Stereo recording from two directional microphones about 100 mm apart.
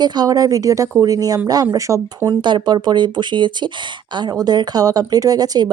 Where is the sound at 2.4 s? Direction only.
50° right (ahead or behind).